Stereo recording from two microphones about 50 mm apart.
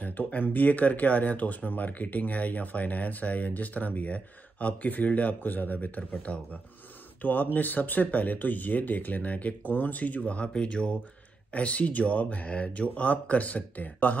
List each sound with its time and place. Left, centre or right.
0.0 s speech: left
7.2 s speech: left